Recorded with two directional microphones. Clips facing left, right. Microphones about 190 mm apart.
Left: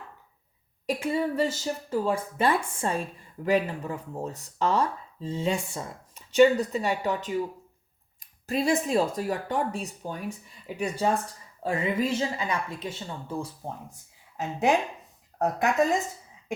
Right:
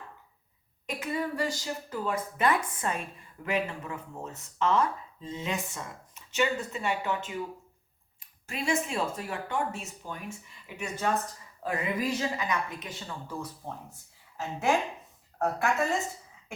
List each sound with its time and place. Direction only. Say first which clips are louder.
0.9 s speech: left 5 dB; 30° left (ahead or behind)
15.4 s speech: left 4 dB; 15° left (ahead or behind)